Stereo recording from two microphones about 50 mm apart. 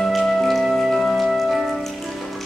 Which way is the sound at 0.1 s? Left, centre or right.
Centre.